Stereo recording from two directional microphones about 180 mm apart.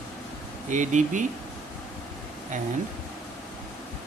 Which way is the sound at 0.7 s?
45° right (ahead or behind).